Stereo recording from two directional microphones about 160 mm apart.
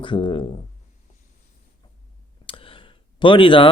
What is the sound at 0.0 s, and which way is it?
Speech, 30° left (ahead or behind).